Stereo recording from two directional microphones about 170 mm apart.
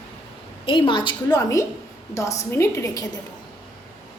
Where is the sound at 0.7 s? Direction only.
30° left (ahead or behind).